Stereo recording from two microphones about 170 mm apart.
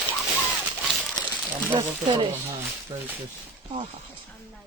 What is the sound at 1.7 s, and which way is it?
Speech, 30° right (ahead or behind).